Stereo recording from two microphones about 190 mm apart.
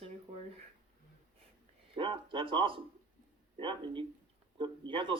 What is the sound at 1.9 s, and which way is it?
Speech, 25° right (ahead or behind).